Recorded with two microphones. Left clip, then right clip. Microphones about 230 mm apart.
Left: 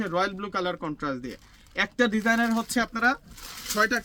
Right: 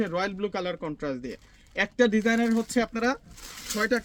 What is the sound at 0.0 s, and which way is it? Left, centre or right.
Speech, centre.